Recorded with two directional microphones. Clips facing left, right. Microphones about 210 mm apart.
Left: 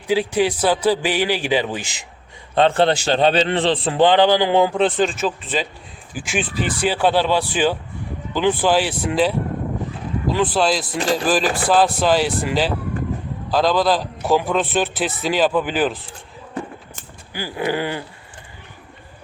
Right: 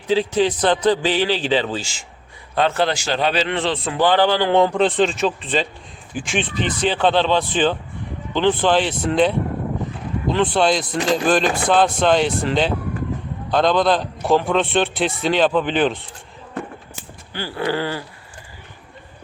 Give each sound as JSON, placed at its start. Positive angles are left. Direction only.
{"t": 0.1, "sound": "a man's voice", "side_deg": 10}
{"t": 2.6, "sound": "a man's voice", "side_deg": 30}
{"t": 17.3, "sound": "a man's voice", "side_deg": 10}